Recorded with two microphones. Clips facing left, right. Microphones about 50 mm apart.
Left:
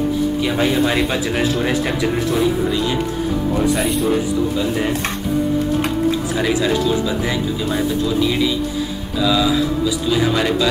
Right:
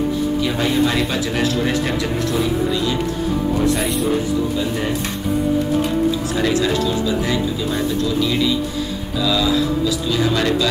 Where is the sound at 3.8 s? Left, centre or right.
Centre.